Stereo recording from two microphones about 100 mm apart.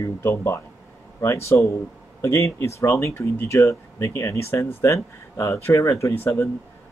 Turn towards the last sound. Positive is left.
turn(degrees=25)  # may be behind; listen again after turning